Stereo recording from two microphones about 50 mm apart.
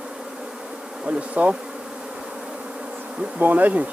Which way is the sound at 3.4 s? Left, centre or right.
Right.